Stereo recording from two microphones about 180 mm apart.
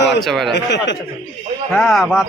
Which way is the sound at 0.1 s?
Centre (ahead or behind).